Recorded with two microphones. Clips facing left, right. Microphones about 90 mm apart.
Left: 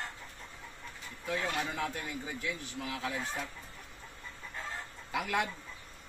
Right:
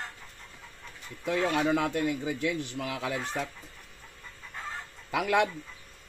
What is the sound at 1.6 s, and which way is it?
A man's voice, 90° right.